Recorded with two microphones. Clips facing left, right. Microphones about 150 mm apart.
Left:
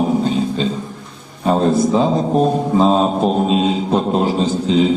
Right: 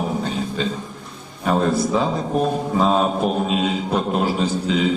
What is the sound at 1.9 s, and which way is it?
A man's voice, 25° left (ahead or behind).